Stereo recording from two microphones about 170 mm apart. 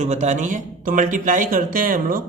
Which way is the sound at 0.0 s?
45° right (ahead or behind).